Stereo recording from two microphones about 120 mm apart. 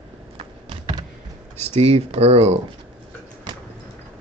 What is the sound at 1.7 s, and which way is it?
Speech, 55° right (ahead or behind).